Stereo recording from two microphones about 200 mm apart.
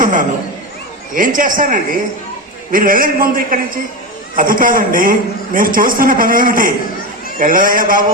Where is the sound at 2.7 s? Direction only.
45° right (ahead or behind).